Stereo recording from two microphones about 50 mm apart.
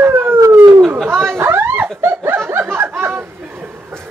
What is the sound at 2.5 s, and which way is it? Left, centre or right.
Snicker, right.